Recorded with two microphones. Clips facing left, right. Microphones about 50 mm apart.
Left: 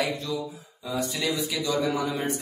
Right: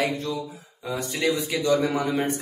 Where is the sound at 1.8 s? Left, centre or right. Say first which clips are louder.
Right 3 dB; right.